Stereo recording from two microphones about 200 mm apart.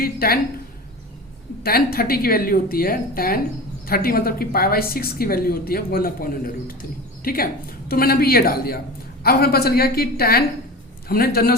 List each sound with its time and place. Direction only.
0.0 s a woman's voice: 50° left (ahead or behind)
1.6 s a woman's voice: 50° left (ahead or behind)